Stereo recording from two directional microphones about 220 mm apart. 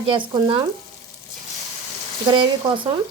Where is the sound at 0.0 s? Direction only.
20° right (ahead or behind).